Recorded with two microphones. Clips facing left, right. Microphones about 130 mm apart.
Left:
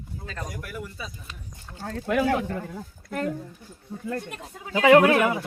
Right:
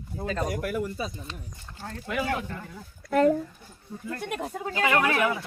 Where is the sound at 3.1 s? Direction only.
90° right.